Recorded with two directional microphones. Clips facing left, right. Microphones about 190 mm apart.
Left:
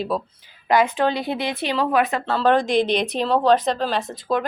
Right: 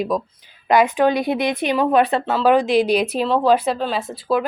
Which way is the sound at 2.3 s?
10° right (ahead or behind).